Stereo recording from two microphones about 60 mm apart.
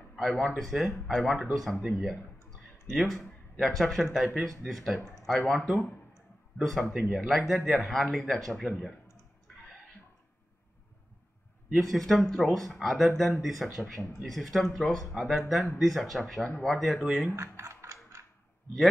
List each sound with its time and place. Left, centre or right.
0.1 s speech: centre
2.9 s speech: centre
11.9 s speech: centre
17.4 s mechanisms: right